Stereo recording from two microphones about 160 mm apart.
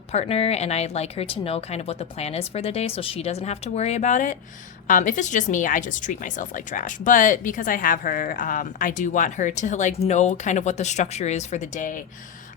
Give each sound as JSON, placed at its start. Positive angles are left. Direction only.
{"t": 0.1, "sound": "speech", "side_deg": 40}